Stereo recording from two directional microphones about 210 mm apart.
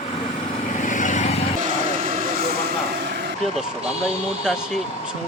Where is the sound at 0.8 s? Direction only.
35° left (ahead or behind).